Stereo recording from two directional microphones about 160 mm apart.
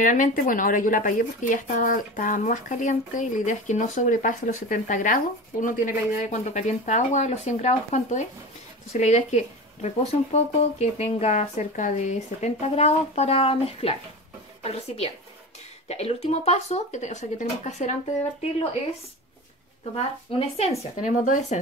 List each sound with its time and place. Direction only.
0.0 s speech: 55° left (ahead or behind)
20.3 s speech: 40° left (ahead or behind)